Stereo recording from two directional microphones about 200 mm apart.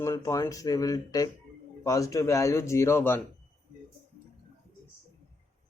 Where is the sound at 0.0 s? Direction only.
15° left (ahead or behind).